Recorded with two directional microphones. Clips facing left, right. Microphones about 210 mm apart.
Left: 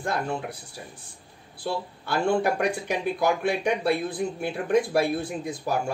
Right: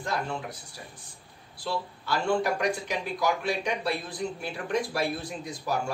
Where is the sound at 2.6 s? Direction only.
55° left (ahead or behind).